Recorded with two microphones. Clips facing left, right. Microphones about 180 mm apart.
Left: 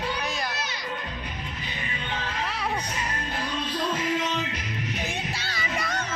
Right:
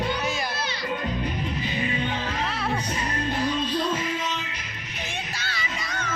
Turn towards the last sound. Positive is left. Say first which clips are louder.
# even
turn(degrees=35)  # may be behind; listen again after turning